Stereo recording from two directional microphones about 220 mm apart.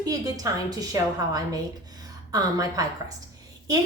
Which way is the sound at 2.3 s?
15° right (ahead or behind).